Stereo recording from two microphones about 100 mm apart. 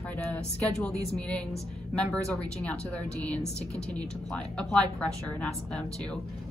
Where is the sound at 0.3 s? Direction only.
15° left (ahead or behind).